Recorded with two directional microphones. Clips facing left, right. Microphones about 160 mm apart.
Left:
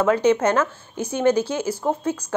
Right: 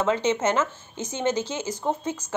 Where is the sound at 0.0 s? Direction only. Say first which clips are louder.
Left 5 dB; 20° right (ahead or behind).